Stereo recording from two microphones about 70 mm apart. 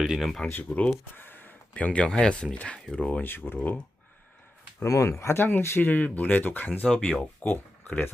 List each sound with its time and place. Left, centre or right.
0.0 s speech: centre
0.3 s speech: centre
0.5 s speech: left
4.9 s speech: left